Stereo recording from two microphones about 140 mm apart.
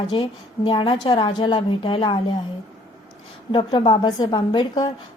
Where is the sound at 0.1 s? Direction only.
40° left (ahead or behind).